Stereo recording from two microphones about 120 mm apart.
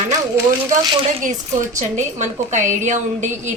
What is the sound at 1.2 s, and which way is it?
A woman's voice, 90° right.